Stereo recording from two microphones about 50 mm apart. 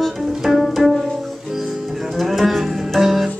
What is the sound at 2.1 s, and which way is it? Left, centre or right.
Music, centre.